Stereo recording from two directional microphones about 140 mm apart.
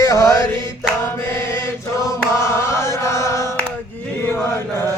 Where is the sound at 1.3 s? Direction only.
20° left (ahead or behind).